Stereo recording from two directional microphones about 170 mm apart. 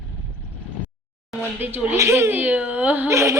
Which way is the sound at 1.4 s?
10° right (ahead or behind).